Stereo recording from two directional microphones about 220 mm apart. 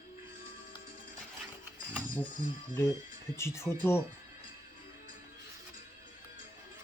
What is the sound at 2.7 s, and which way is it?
Speech, 10° left (ahead or behind).